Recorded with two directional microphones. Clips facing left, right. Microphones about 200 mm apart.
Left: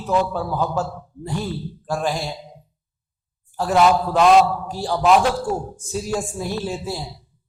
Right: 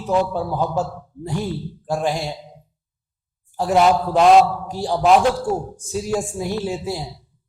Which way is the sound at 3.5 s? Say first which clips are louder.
Right 1 dB; 20° right (ahead or behind).